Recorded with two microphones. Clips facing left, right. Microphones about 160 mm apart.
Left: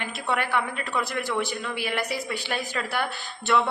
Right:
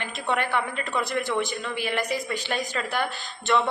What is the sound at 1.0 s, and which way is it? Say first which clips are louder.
Speech: right 1 dB; 15° right (ahead or behind).